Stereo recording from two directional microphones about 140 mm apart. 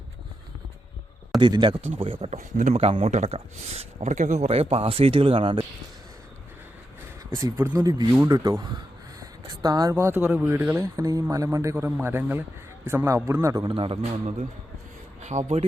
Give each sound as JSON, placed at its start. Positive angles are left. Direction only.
{"t": 1.4, "sound": "speech", "side_deg": -35}
{"t": 2.0, "sound": "speech", "side_deg": -45}
{"t": 7.3, "sound": "a man's voice", "side_deg": -20}
{"t": 9.2, "sound": "a sound", "side_deg": -30}
{"t": 9.9, "sound": "a man's voice", "side_deg": -20}
{"t": 13.7, "sound": "speech", "side_deg": -40}